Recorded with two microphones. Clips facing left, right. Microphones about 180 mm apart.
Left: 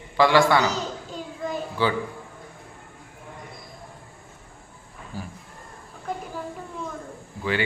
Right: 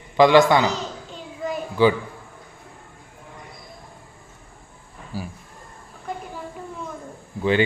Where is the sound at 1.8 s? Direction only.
15° right (ahead or behind).